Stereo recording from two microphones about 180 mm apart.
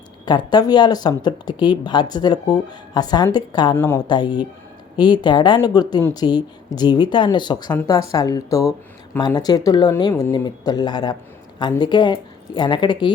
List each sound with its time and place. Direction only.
0.3 s speech: 25° left (ahead or behind)